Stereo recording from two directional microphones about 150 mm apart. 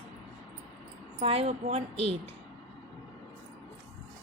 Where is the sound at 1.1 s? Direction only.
40° right (ahead or behind).